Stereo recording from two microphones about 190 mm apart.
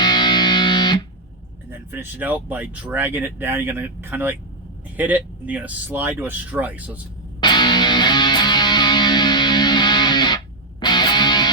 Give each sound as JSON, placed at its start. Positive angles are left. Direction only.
{"t": 0.0, "sound": "music", "side_deg": 25}
{"t": 1.9, "sound": "speech", "side_deg": -10}
{"t": 7.4, "sound": "music", "side_deg": 25}